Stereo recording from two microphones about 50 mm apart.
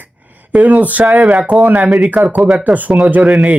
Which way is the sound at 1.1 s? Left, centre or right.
Centre.